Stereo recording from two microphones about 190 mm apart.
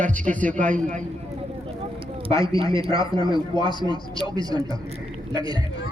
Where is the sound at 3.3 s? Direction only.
25° right (ahead or behind).